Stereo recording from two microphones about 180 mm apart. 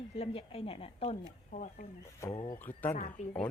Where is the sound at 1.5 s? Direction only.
45° left (ahead or behind).